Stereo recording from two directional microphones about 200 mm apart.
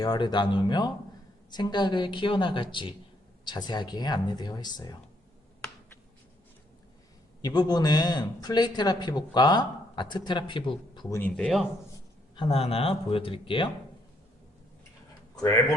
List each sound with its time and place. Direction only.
0.0 s a man's voice: 20° left (ahead or behind)
7.4 s a man's voice: 20° left (ahead or behind)
11.2 s speech: 5° left (ahead or behind)
12.4 s a man's voice: 30° left (ahead or behind)